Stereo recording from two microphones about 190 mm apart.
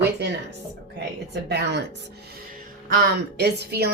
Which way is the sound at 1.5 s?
65° right (ahead or behind).